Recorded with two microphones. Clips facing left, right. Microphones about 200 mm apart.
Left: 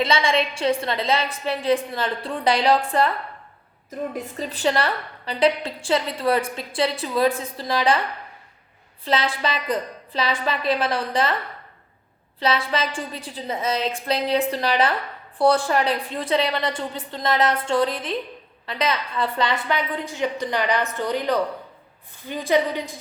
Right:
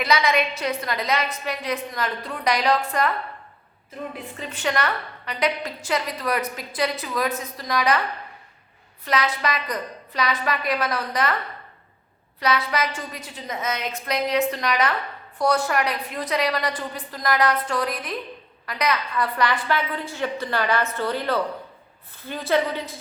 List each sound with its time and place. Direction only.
0.0 s a woman's voice: 25° left (ahead or behind)
3.8 s a woman's voice: 40° left (ahead or behind)
9.0 s a woman's voice: 30° left (ahead or behind)
12.4 s a woman's voice: 30° left (ahead or behind)